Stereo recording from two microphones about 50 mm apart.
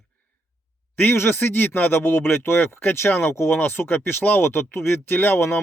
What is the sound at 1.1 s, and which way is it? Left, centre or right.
Speech, left.